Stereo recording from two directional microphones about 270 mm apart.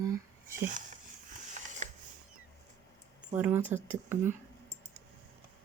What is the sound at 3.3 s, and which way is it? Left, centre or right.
Speech, centre.